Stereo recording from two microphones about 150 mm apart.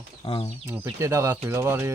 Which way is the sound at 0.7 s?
15° right (ahead or behind).